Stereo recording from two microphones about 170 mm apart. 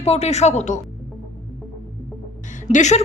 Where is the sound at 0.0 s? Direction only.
40° left (ahead or behind).